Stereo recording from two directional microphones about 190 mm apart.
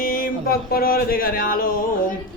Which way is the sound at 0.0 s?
50° left (ahead or behind).